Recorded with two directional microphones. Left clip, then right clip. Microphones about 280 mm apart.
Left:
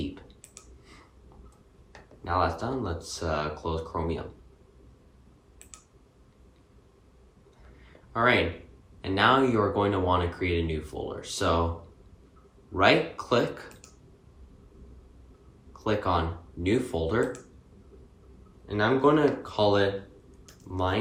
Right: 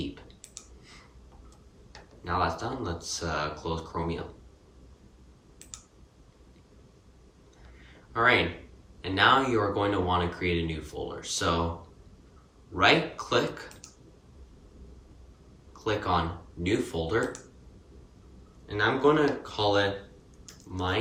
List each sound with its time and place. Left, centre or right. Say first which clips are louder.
0.0 s clicking: left 1 dB; centre
1.9 s speech: left 2 dB; centre
5.7 s clicking: right 5 dB; left
8.1 s speech: even; centre
12.7 s speech: left 1 dB; centre
15.8 s speech: left 1 dB; centre
18.7 s speech: left 1 dB; centre